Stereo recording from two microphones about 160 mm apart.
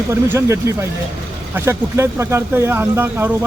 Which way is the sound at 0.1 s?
15° right (ahead or behind).